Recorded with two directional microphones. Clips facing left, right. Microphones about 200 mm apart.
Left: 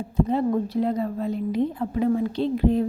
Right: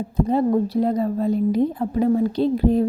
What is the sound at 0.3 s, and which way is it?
A woman's voice, 40° right (ahead or behind).